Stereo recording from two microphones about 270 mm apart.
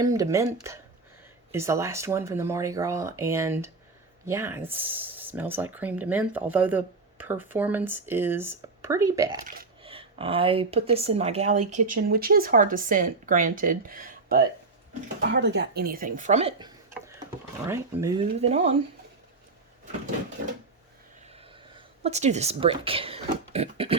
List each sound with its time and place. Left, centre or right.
0.0 s speech: centre
18.2 s speech: right
21.7 s speech: right